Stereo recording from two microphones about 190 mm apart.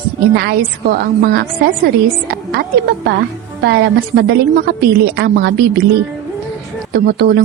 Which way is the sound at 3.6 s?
60° right (ahead or behind).